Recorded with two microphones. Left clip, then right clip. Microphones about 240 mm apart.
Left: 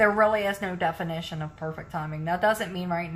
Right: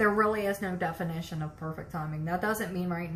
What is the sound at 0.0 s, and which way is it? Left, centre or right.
A woman's voice, left.